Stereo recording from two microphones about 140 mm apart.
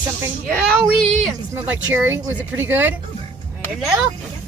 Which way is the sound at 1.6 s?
15° right (ahead or behind).